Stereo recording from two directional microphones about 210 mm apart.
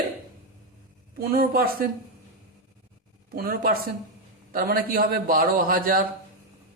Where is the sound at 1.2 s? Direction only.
45° right (ahead or behind).